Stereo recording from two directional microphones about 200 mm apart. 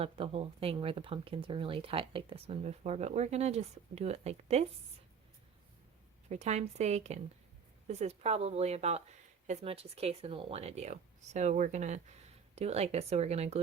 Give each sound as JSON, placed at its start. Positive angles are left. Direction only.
{"t": 0.0, "sound": "speech", "side_deg": -30}
{"t": 6.2, "sound": "speech", "side_deg": -35}